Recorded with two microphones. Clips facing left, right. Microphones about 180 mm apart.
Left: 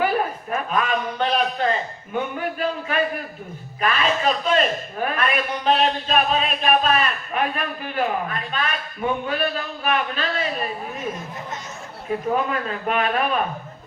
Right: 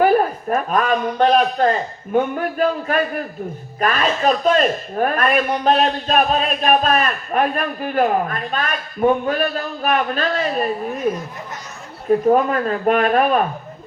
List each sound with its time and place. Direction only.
0.0 s a man's voice: 45° right (ahead or behind)
12.3 s a man's voice: 45° right (ahead or behind)